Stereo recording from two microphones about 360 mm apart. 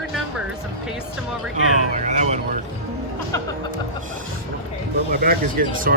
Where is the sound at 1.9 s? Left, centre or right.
Centre.